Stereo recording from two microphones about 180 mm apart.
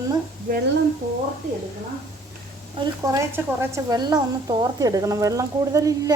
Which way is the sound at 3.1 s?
15° right (ahead or behind).